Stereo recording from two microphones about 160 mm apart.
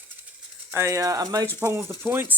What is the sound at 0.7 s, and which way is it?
Speech, 20° right (ahead or behind).